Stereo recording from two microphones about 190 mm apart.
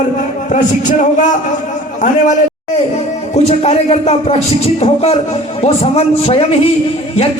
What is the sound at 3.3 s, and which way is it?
A man's voice, 35° left (ahead or behind).